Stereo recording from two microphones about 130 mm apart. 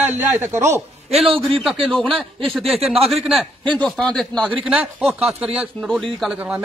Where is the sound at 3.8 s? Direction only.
5° left (ahead or behind).